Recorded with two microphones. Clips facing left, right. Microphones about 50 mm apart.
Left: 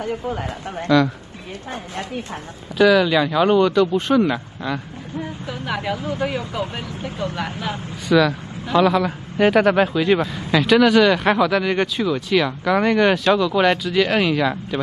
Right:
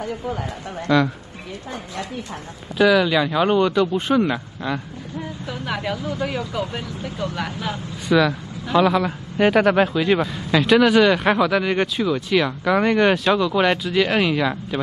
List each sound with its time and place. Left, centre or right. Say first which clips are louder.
0.9 s a woman's voice: left 2 dB; centre
2.8 s speech: left 1 dB; centre
4.7 s a sound: left 1 dB; left
6.0 s speech: left 1 dB; left
8.1 s speech: left 1 dB; centre